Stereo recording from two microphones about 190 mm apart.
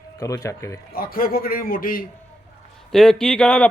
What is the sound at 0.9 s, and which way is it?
A man's voice, 50° left (ahead or behind).